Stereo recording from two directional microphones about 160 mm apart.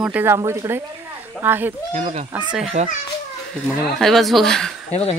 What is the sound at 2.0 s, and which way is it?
Speech, 45° right (ahead or behind).